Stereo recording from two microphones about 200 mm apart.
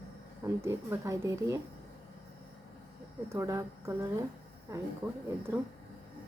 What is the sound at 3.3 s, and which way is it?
Speech, 15° right (ahead or behind).